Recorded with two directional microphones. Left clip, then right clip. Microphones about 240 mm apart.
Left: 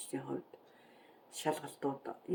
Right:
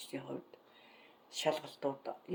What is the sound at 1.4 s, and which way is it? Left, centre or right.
Speech, centre.